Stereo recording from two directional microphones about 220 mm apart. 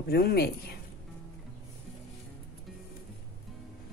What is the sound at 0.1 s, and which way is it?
Speech, 45° left (ahead or behind).